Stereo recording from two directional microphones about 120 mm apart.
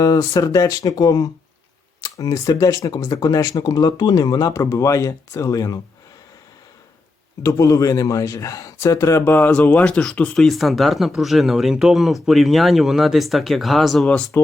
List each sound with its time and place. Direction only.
0.0 s speech: 30° left (ahead or behind)
7.4 s speech: 30° left (ahead or behind); by 14.3 s 5° left (ahead or behind)